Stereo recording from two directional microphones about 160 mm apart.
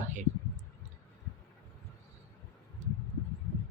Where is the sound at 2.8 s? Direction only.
50° right (ahead or behind).